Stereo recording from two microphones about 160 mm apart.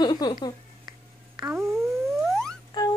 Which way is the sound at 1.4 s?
Centre (ahead or behind).